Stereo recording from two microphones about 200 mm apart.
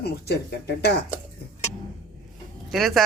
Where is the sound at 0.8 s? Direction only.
55° left (ahead or behind).